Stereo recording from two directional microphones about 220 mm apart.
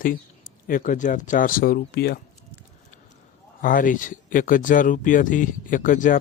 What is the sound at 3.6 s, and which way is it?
Speech, 40° left (ahead or behind).